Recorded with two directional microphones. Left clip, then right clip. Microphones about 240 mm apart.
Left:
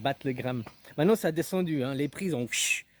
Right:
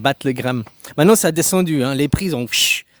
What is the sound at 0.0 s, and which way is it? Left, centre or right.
A man's voice, right.